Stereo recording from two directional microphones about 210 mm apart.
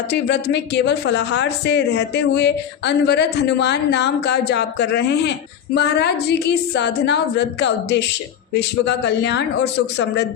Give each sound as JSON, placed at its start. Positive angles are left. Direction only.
{"t": 0.1, "sound": "speech", "side_deg": 55}